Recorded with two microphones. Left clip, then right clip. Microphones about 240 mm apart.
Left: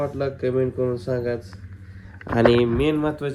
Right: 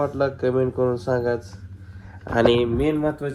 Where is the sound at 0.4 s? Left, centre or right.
Centre.